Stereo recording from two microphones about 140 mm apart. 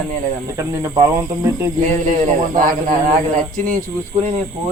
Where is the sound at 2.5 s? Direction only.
75° right (ahead or behind).